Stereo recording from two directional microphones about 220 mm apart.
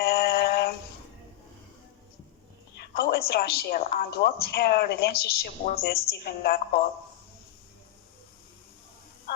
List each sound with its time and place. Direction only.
0.0 s synthetic singing: 45° left (ahead or behind)
2.9 s a woman's voice: 45° left (ahead or behind)